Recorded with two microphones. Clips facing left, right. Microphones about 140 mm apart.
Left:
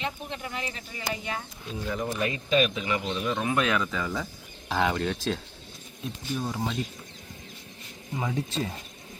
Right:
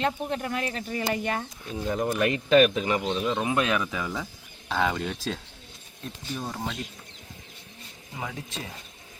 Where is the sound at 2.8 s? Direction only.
30° right (ahead or behind); by 4.2 s 10° right (ahead or behind).